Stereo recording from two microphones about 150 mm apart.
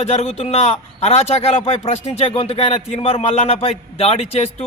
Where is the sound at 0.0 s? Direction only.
45° left (ahead or behind).